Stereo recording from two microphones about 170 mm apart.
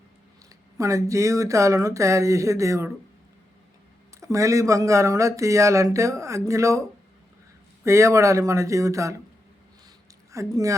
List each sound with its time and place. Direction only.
0.8 s speech: 20° right (ahead or behind)
4.2 s speech: 20° right (ahead or behind)
7.9 s speech: 15° right (ahead or behind)
10.3 s speech: 20° right (ahead or behind)